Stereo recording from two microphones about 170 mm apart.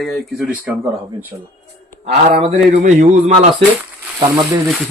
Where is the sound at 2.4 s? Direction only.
45° right (ahead or behind).